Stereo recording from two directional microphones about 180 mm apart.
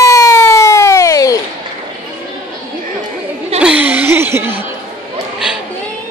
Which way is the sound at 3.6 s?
5° right (ahead or behind).